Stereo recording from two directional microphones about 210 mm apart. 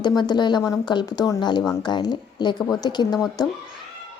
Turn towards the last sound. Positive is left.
turn(degrees=20)  # may be behind; listen again after turning